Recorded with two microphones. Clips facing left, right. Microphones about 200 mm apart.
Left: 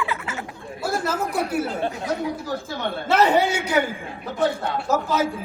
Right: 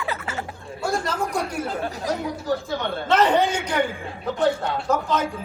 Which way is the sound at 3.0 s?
10° left (ahead or behind).